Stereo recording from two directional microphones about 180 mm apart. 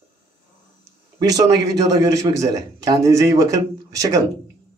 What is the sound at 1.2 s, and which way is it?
A man's voice, 20° right (ahead or behind).